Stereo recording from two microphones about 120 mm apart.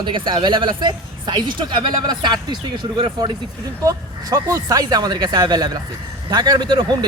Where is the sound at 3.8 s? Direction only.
30° right (ahead or behind).